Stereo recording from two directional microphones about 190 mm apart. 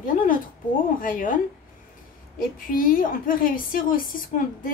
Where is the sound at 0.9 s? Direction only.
45° left (ahead or behind).